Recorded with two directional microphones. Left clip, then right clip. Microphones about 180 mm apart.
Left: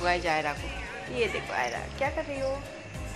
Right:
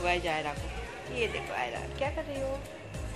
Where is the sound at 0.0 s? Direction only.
15° left (ahead or behind).